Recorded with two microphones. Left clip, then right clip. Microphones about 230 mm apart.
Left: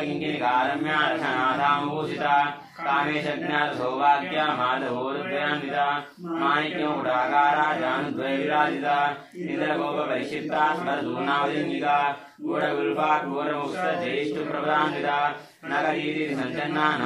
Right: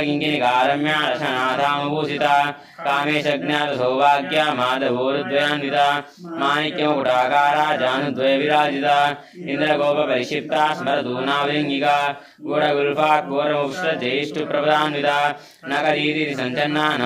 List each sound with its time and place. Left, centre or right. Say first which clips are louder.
0.0 s mantra: right 7 dB; right